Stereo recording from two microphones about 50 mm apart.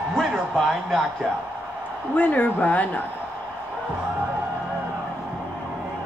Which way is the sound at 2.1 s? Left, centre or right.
Left.